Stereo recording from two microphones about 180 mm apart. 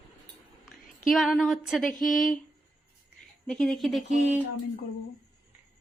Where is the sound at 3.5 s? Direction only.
Centre (ahead or behind).